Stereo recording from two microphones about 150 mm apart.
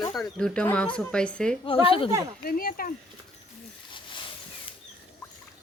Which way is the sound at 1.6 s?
35° left (ahead or behind).